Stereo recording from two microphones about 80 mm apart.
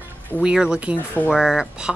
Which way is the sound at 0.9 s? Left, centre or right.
Left.